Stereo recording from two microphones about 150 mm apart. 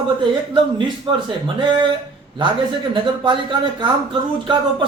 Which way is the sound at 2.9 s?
30° right (ahead or behind).